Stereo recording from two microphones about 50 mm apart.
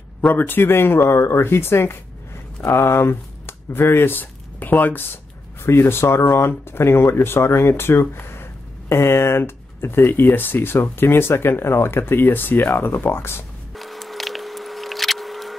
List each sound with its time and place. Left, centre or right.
0.3 s speech: left
2.6 s speech: left
5.7 s speech: left
13.7 s a sound: centre